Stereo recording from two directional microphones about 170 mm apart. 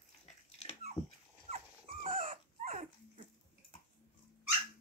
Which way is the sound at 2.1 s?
50° right (ahead or behind).